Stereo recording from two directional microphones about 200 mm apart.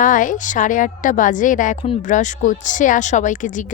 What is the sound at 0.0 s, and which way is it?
A woman's voice, 40° left (ahead or behind).